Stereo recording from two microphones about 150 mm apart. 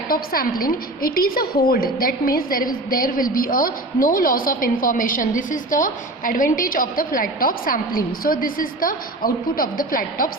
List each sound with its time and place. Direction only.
0.1 s a woman's voice: 75° left (ahead or behind)